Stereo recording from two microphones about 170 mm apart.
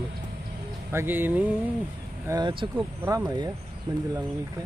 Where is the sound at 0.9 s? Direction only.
15° right (ahead or behind).